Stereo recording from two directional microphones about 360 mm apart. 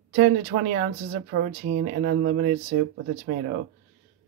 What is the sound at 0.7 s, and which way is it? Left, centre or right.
Speech, right.